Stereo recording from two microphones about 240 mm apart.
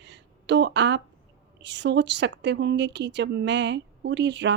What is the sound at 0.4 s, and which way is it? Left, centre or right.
A woman's voice, right.